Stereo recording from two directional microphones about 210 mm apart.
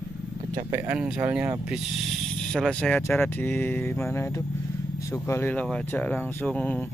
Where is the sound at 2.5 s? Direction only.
5° left (ahead or behind).